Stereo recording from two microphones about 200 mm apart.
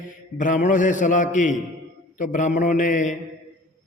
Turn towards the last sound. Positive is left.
turn(degrees=40)  # may be behind; listen again after turning